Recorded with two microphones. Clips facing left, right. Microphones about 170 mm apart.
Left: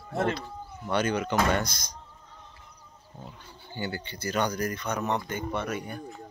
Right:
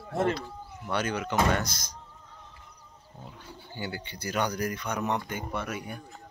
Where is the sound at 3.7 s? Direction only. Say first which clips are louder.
Left 3 dB; 10° right (ahead or behind).